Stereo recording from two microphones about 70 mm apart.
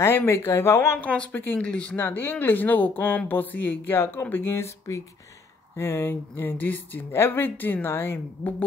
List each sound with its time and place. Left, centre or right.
0.0 s speech: left
1.0 s speech: centre
1.3 s speech: left
1.6 s speech: centre
2.0 s speech: left